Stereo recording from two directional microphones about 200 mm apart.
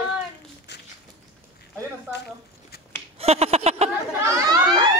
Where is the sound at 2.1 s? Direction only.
10° right (ahead or behind).